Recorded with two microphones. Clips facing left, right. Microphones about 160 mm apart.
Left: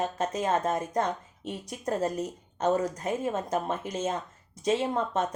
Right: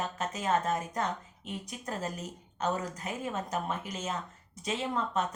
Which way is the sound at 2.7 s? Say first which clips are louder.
Left 8 dB; 45° left (ahead or behind).